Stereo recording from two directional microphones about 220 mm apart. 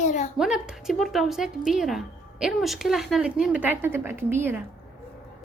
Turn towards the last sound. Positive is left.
turn(degrees=-10)  # may be behind; listen again after turning